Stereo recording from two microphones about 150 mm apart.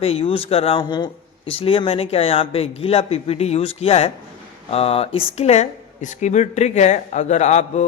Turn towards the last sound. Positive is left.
turn(degrees=50)  # may be behind; listen again after turning